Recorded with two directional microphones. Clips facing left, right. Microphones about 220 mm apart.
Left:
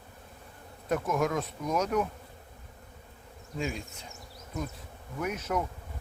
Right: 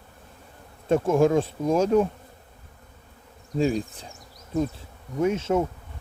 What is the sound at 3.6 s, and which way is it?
Bee, 35° right (ahead or behind).